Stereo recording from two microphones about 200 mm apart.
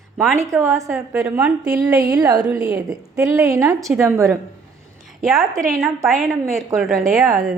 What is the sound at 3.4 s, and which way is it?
Speech, 15° right (ahead or behind).